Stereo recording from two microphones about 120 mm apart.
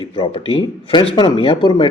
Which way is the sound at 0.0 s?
50° left (ahead or behind).